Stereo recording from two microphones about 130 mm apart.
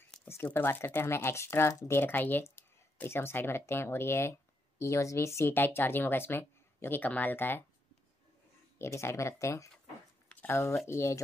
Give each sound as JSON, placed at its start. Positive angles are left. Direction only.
{"t": 0.2, "sound": "speech", "side_deg": 15}
{"t": 8.7, "sound": "speech", "side_deg": 20}